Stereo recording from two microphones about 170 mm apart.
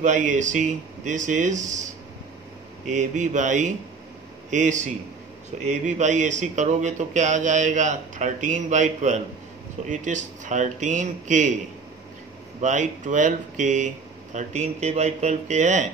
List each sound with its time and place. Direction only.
0.0 s a man's voice: 45° right (ahead or behind)
2.9 s a man's voice: 45° right (ahead or behind)
12.5 s a man's voice: 45° right (ahead or behind)